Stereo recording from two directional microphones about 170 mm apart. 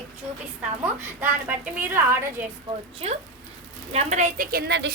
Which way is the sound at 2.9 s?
35° right (ahead or behind).